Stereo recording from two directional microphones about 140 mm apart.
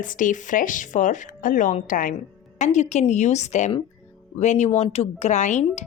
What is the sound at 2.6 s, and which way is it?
Speech, 55° left (ahead or behind).